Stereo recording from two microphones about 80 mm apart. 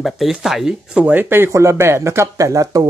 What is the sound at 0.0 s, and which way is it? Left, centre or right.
Speech, centre.